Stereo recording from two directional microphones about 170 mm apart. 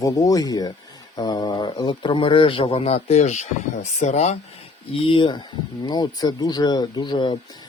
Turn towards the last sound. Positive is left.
turn(degrees=25)  # may be behind; listen again after turning